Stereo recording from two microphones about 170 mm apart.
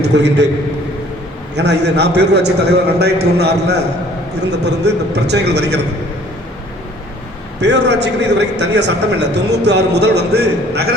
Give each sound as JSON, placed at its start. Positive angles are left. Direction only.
{"t": 0.0, "sound": "a man's voice", "side_deg": -85}
{"t": 1.5, "sound": "a man's voice", "side_deg": -85}
{"t": 7.6, "sound": "a man's voice", "side_deg": -90}